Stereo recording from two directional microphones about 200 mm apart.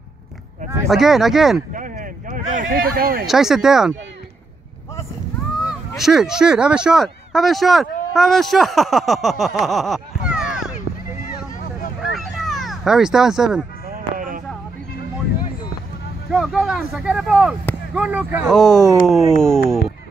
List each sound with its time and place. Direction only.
0.8 s speech: centre (ahead or behind)
1.7 s a sound: 40° right (ahead or behind)
3.3 s speech: centre (ahead or behind)
5.7 s speech: centre (ahead or behind)
12.0 s a sound: centre (ahead or behind)
13.8 s music: 45° right (ahead or behind)
16.3 s speech: centre (ahead or behind)